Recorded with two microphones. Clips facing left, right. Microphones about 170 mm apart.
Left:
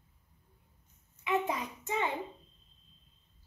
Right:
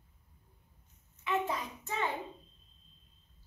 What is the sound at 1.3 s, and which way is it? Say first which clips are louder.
Hands: left 2 dB; 20° left (ahead or behind).